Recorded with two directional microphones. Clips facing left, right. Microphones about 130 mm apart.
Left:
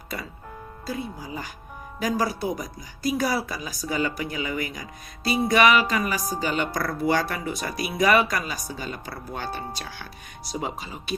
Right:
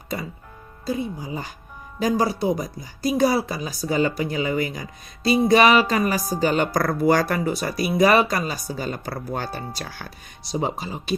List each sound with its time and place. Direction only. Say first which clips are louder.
0.9 s speech: right 6 dB; 20° right (ahead or behind)